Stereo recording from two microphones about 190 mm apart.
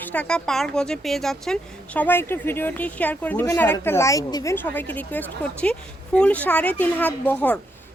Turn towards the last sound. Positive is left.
turn(degrees=10)  # may be behind; listen again after turning